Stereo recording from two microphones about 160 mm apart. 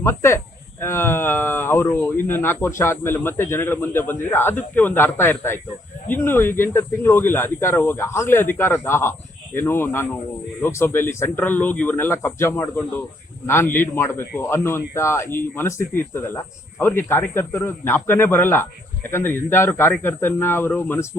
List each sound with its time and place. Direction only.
0.0 s speech: 15° left (ahead or behind)